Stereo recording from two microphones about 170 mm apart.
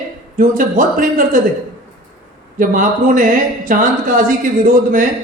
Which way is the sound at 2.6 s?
50° right (ahead or behind).